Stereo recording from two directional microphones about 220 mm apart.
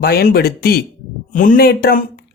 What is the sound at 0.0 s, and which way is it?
Speech, 45° left (ahead or behind).